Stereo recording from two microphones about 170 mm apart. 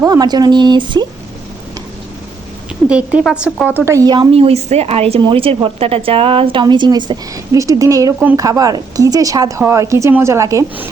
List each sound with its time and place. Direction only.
0.0 s a woman's voice: 20° right (ahead or behind)
2.9 s a woman's voice: 5° right (ahead or behind)